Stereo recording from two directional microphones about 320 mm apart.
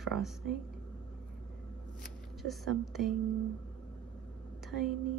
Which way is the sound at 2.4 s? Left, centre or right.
Centre.